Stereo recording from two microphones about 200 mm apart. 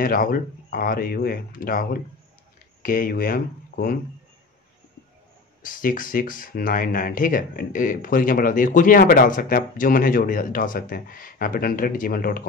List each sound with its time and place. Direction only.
0.0 s speech: 45° left (ahead or behind)
5.6 s speech: 45° left (ahead or behind)